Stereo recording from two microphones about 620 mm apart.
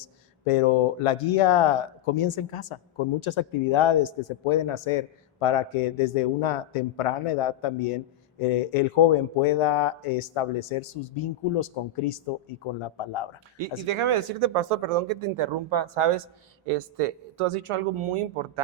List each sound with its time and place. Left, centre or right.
0.4 s speech: left
13.6 s speech: right